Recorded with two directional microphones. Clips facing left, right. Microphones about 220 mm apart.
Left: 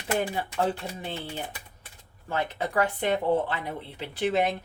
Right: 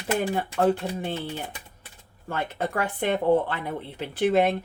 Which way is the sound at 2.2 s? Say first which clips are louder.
Right 1 dB; 55° right (ahead or behind).